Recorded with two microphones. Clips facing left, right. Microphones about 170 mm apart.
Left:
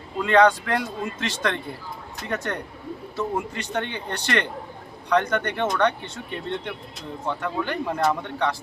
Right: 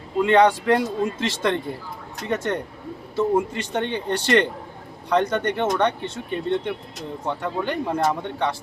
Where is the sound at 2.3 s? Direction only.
25° right (ahead or behind).